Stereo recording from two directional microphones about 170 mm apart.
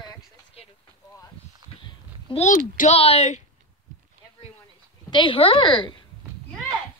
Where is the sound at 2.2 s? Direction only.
35° left (ahead or behind).